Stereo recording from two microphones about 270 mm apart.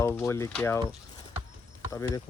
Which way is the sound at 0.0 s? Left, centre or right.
Centre.